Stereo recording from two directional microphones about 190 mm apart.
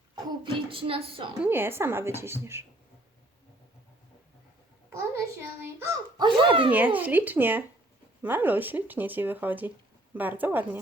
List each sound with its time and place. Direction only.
0.4 s a woman's voice: 30° right (ahead or behind)
1.5 s speech: 10° right (ahead or behind)
4.9 s a woman's voice: 15° right (ahead or behind)
6.7 s speech: 10° right (ahead or behind)